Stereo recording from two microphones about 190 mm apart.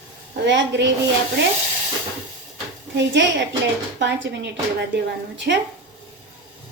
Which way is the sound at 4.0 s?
65° right (ahead or behind).